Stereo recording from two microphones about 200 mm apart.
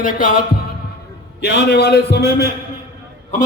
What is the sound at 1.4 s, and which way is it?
A man's voice, 55° left (ahead or behind).